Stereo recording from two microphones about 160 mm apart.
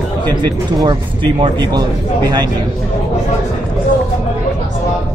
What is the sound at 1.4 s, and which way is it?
Speech, 25° right (ahead or behind).